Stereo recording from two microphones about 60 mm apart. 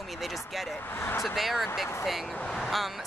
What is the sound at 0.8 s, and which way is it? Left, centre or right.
Speech, left.